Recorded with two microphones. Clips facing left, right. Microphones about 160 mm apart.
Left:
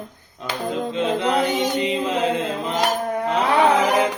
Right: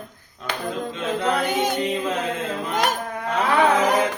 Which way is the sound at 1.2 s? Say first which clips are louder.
Right 1 dB; 25° left (ahead or behind).